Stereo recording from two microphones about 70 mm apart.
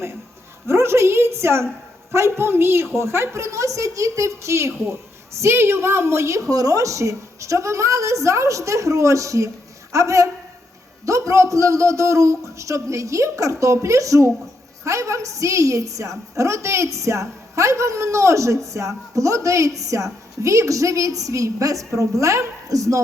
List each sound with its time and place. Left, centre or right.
0.7 s a woman's voice: right